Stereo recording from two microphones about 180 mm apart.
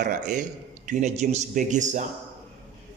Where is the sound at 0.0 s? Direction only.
45° right (ahead or behind).